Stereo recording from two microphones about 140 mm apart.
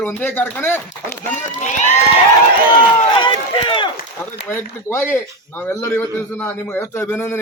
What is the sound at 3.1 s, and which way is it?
Run, 35° left (ahead or behind).